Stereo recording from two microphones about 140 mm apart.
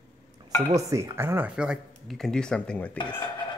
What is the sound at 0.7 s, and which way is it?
Speech, 20° right (ahead or behind).